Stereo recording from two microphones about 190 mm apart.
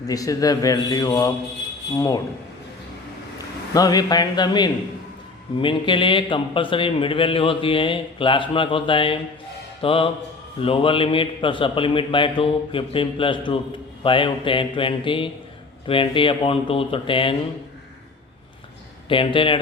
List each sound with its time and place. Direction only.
0.1 s a man's voice: 20° left (ahead or behind)
3.8 s a man's voice: 20° left (ahead or behind)
19.0 s a man's voice: 25° left (ahead or behind)